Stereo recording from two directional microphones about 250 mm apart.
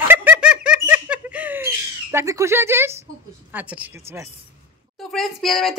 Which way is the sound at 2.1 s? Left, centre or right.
Centre.